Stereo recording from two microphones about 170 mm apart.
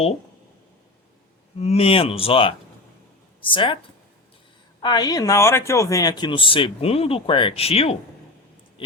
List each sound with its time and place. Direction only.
1.5 s speech: 35° left (ahead or behind)
4.8 s speech: 25° left (ahead or behind)